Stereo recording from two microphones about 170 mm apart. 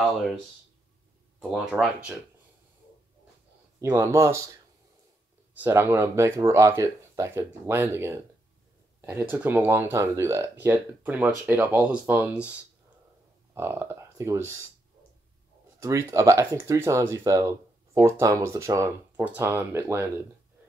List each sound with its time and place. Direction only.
1.5 s speech: 5° right (ahead or behind)
3.8 s speech: 15° right (ahead or behind)
5.6 s speech: 15° right (ahead or behind)
9.3 s speech: 10° right (ahead or behind)
15.8 s speech: 20° right (ahead or behind)